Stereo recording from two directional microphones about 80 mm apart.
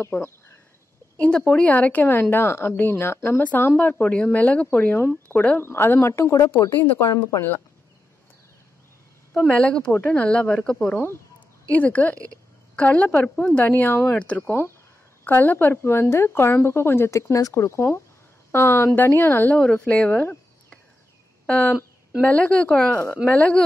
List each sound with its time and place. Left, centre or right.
0.0 s speech: left
1.2 s a woman's voice: centre
5.6 s a woman's voice: left
9.6 s speech: centre
11.0 s speech: left
14.1 s a woman's voice: centre
19.5 s speech: centre